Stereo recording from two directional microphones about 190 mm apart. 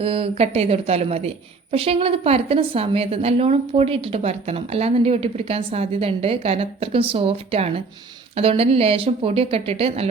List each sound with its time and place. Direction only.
0.0 s a woman's voice: 30° right (ahead or behind)